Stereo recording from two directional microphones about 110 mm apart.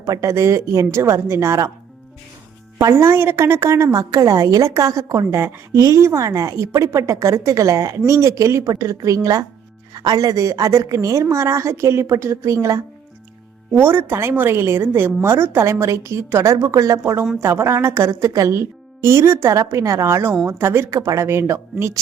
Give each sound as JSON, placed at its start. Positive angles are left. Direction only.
{"t": 0.0, "sound": "a woman's voice", "side_deg": -25}
{"t": 2.8, "sound": "a woman's voice", "side_deg": -20}
{"t": 13.7, "sound": "a woman's voice", "side_deg": -20}